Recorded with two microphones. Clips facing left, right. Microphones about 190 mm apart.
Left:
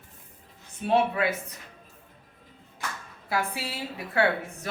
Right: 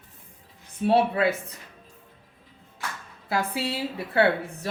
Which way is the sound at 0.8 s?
30° right (ahead or behind).